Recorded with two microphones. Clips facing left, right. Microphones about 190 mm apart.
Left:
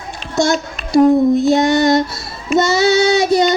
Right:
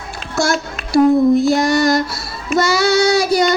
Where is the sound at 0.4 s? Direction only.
20° left (ahead or behind).